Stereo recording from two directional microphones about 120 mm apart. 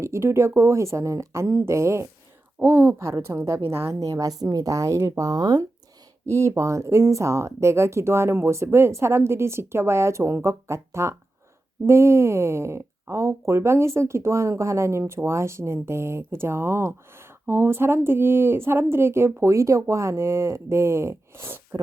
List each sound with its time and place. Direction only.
0.0 s speech: 20° right (ahead or behind)
6.2 s speech: 25° right (ahead or behind)